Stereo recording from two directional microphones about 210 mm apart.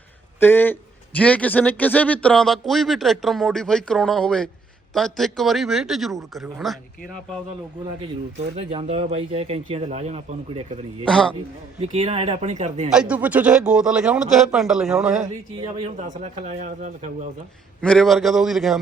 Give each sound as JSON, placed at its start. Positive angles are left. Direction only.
{"t": 0.3, "sound": "a man's voice", "side_deg": 10}
{"t": 8.5, "sound": "speech", "side_deg": -30}
{"t": 11.0, "sound": "a man's voice", "side_deg": 5}
{"t": 11.8, "sound": "speech", "side_deg": -30}
{"t": 12.9, "sound": "a man's voice", "side_deg": -5}
{"t": 16.0, "sound": "speech", "side_deg": -35}
{"t": 17.8, "sound": "a man's voice", "side_deg": 0}